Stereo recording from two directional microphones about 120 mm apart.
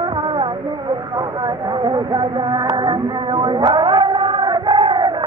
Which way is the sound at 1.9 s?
40° right (ahead or behind).